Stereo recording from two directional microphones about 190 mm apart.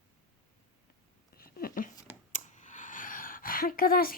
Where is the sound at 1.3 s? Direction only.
50° left (ahead or behind).